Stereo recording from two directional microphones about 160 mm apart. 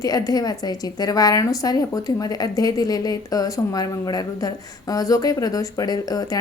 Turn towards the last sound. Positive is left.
turn(degrees=25)  # may be behind; listen again after turning